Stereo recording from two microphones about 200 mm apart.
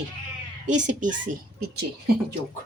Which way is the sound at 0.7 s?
40° right (ahead or behind).